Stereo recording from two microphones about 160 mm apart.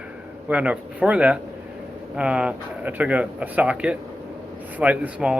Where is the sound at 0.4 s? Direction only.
10° right (ahead or behind).